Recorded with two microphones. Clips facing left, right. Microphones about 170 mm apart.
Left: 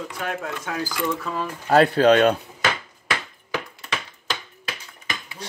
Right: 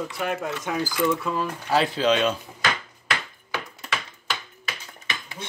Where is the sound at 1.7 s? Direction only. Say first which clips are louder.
Left 7 dB; 55° left (ahead or behind).